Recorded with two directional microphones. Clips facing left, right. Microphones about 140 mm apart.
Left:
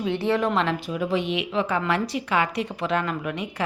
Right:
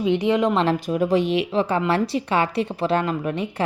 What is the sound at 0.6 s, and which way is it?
A woman's voice, 40° right (ahead or behind).